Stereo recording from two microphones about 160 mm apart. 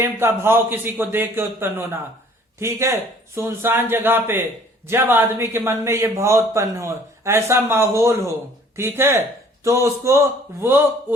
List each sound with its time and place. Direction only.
0.0 s a man's voice: 15° right (ahead or behind)